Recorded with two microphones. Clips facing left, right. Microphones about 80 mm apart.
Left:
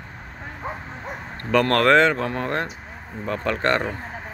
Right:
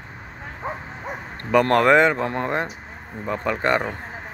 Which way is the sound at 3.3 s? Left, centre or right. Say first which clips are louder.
Even; centre.